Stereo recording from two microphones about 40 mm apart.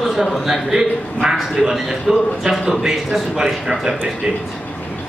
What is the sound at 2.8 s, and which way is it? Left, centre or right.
A man's voice, centre.